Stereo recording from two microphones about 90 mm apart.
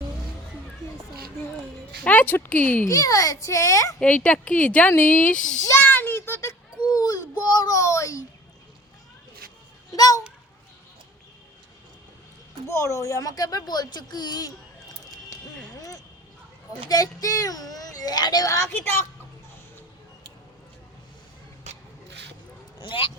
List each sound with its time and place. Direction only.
2.0 s speech: 20° left (ahead or behind)
2.9 s a child's voice: 40° left (ahead or behind)
4.0 s speech: 15° left (ahead or behind)
5.7 s a sound: 20° left (ahead or behind)
6.5 s a sound: 45° left (ahead or behind)
9.9 s a child's voice: 45° left (ahead or behind)
12.6 s speech: 30° left (ahead or behind); by 14.5 s 50° left (ahead or behind)
15.0 s a sound: 45° left (ahead or behind)
16.9 s speech: 40° left (ahead or behind)
18.5 s speech: 25° left (ahead or behind)
22.8 s speech: 70° left (ahead or behind)